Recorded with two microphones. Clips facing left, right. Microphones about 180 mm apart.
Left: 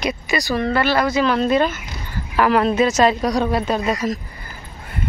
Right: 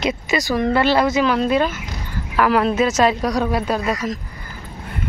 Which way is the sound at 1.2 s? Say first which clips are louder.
Even; 10° right (ahead or behind).